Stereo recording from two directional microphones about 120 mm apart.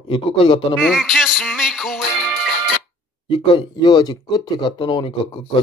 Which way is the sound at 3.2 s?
45° left (ahead or behind).